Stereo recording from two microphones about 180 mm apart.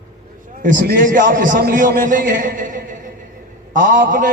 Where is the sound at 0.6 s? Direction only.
50° right (ahead or behind).